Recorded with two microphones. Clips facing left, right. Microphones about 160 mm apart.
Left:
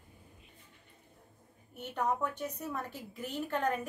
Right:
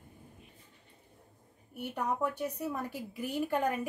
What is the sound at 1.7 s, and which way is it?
A woman's voice, 10° right (ahead or behind).